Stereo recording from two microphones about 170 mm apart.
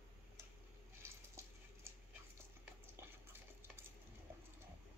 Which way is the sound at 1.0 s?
15° right (ahead or behind).